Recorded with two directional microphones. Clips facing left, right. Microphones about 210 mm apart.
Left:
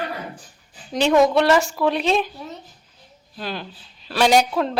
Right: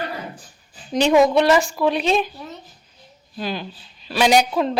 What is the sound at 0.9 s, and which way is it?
A woman's voice, centre (ahead or behind).